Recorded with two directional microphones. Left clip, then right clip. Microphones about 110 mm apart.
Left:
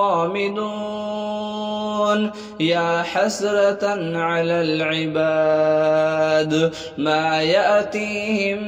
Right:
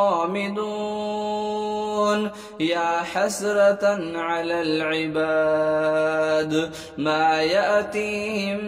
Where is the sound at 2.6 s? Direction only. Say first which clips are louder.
Left 3 dB; 20° left (ahead or behind).